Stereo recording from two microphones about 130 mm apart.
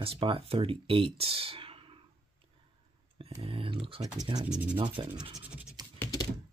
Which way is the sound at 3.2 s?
45° right (ahead or behind).